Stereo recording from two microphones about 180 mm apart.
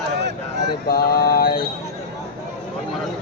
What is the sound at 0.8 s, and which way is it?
Mantra, 55° left (ahead or behind).